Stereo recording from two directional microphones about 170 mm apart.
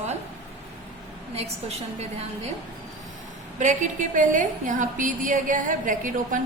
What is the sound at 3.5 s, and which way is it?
A woman's voice, 50° right (ahead or behind).